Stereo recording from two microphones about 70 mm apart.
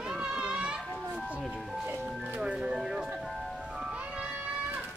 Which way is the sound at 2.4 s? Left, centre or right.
Centre.